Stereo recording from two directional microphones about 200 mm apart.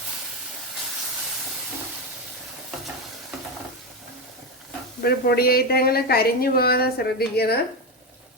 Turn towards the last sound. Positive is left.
turn(degrees=50)  # may be behind; listen again after turning